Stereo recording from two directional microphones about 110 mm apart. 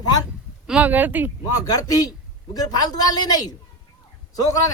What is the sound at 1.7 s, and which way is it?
A man's voice, 35° left (ahead or behind).